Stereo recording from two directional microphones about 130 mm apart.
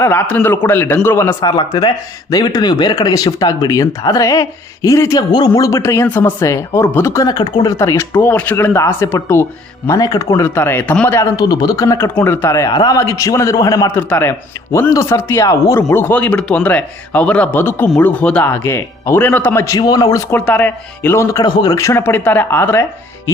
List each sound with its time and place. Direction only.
0.0 s speech: 20° left (ahead or behind); by 7.7 s 35° left (ahead or behind)
7.7 s speech: 20° left (ahead or behind)
11.2 s speech: 30° left (ahead or behind)
20.3 s speech: 10° left (ahead or behind)